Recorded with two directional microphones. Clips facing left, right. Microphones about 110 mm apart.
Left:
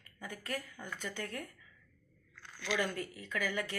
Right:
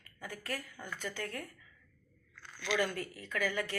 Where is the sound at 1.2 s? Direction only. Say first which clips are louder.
Even; 25° left (ahead or behind).